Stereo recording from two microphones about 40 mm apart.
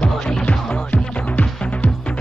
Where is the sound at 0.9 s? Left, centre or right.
Left.